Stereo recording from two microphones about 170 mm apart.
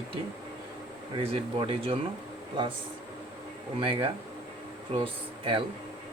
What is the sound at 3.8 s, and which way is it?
Speech, 30° right (ahead or behind).